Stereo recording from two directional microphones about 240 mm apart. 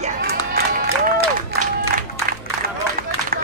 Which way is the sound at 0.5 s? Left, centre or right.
Right.